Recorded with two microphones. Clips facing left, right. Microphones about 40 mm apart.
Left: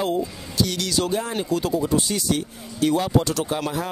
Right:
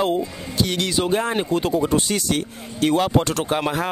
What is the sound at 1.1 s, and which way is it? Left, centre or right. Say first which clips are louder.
Speech: right 3 dB; right.